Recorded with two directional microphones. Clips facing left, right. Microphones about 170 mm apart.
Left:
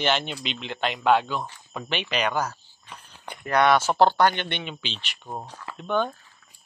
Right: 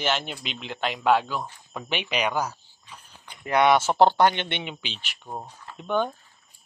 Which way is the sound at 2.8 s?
65° left (ahead or behind).